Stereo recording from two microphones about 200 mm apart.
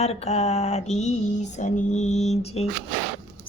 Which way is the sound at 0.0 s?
30° left (ahead or behind).